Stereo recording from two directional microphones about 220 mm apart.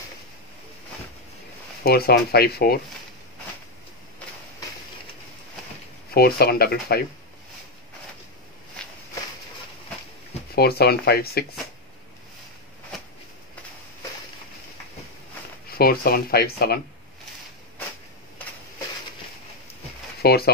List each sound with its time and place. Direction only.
1.8 s speech: 45° left (ahead or behind)
6.1 s speech: 45° left (ahead or behind)
10.5 s speech: 45° left (ahead or behind)
15.7 s speech: 45° left (ahead or behind)
20.2 s speech: 45° left (ahead or behind)